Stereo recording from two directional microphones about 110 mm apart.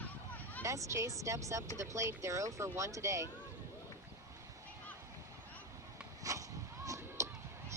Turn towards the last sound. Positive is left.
turn(degrees=-30)  # may be behind; listen again after turning